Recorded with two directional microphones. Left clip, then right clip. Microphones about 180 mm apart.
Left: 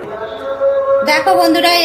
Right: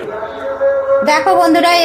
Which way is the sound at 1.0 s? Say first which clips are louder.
Right 2 dB; 35° right (ahead or behind).